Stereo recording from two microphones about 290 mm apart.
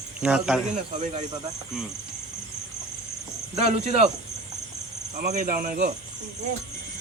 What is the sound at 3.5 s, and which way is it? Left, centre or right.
Speech, right.